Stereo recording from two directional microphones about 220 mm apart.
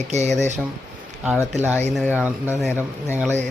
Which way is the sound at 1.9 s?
Centre (ahead or behind).